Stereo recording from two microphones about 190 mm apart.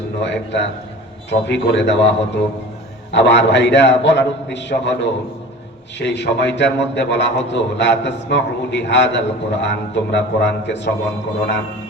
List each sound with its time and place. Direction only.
0.2 s a man's voice: 65° left (ahead or behind)